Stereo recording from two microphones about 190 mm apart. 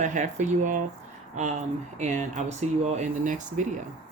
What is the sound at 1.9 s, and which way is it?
Speech, 40° right (ahead or behind).